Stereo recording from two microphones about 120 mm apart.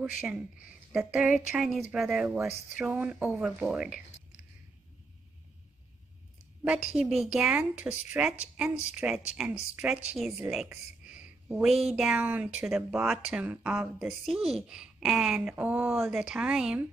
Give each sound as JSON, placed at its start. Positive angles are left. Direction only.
{"t": 0.0, "sound": "speech", "side_deg": -10}
{"t": 2.2, "sound": "speech", "side_deg": -15}
{"t": 6.6, "sound": "a woman's voice", "side_deg": -10}